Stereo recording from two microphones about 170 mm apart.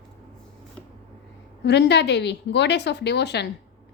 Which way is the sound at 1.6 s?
90° left.